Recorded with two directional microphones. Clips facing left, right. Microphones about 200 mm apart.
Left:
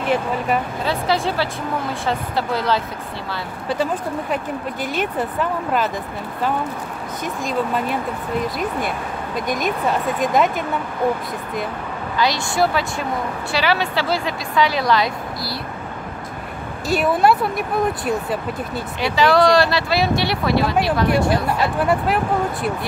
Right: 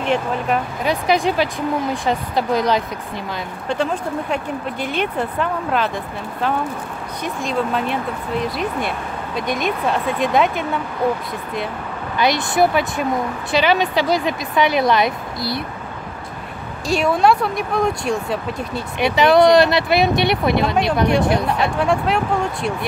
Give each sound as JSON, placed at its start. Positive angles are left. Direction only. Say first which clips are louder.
{"t": 0.0, "sound": "speech", "louder": "even", "side_deg": 5}
{"t": 0.8, "sound": "speech", "louder": "right 4 dB", "side_deg": -15}
{"t": 3.6, "sound": "speech", "louder": "even", "side_deg": 5}
{"t": 5.4, "sound": "speech", "louder": "even", "side_deg": 5}
{"t": 7.4, "sound": "speech", "louder": "right 1 dB", "side_deg": 5}
{"t": 9.6, "sound": "speech", "louder": "even", "side_deg": 0}
{"t": 12.2, "sound": "speech", "louder": "right 3 dB", "side_deg": -20}
{"t": 16.8, "sound": "speech", "louder": "right 1 dB", "side_deg": 5}
{"t": 18.9, "sound": "speech", "louder": "right 3 dB", "side_deg": -20}
{"t": 21.5, "sound": "speech", "louder": "right 1 dB", "side_deg": 0}